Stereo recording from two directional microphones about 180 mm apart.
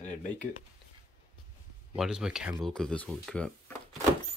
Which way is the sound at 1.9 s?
5° right (ahead or behind).